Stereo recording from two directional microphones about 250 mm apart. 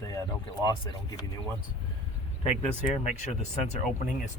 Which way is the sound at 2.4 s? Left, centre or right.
Left.